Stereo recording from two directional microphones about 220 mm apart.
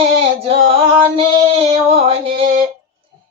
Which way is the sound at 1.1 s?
25° right (ahead or behind).